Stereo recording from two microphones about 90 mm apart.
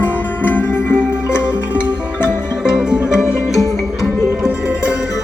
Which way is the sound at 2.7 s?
10° right (ahead or behind).